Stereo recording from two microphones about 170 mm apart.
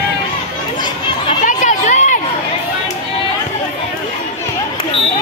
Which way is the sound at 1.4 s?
45° left (ahead or behind).